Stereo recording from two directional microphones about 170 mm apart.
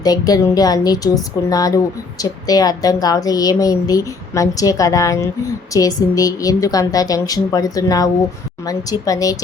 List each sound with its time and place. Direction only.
0.0 s a woman's voice: 20° left (ahead or behind)